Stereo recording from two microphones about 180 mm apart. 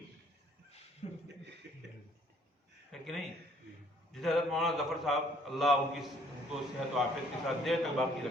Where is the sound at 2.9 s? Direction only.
Centre (ahead or behind).